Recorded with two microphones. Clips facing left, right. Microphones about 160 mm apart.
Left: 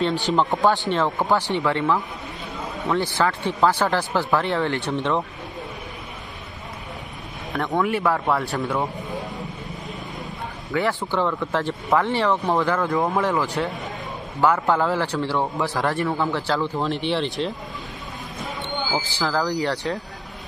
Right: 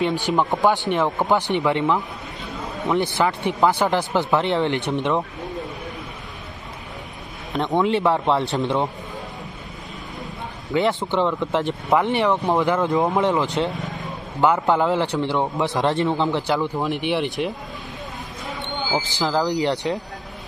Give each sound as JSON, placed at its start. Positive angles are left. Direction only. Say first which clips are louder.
{"t": 0.3, "sound": "speech", "louder": "even", "side_deg": -10}
{"t": 7.5, "sound": "speech", "louder": "right 3 dB", "side_deg": -20}
{"t": 10.7, "sound": "speech", "louder": "right 3 dB", "side_deg": -20}
{"t": 19.0, "sound": "speech", "louder": "right 4 dB", "side_deg": -20}